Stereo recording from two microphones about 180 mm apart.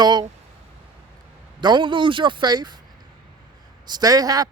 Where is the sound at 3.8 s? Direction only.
20° right (ahead or behind).